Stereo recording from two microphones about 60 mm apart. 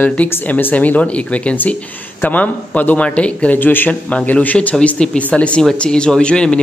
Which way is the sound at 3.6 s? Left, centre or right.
Left.